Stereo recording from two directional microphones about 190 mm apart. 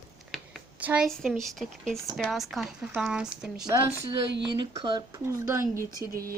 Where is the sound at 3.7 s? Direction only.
20° right (ahead or behind).